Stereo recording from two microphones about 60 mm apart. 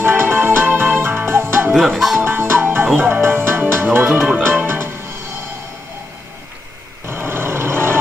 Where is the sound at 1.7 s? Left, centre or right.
Centre.